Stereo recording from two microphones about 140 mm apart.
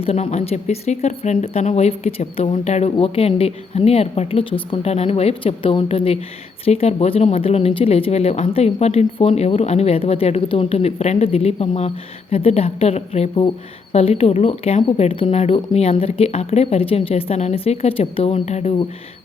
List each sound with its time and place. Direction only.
0.0 s speech: 45° left (ahead or behind)